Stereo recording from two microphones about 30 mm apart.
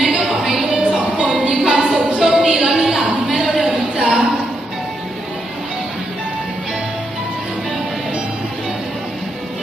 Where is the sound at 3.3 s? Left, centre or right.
Centre.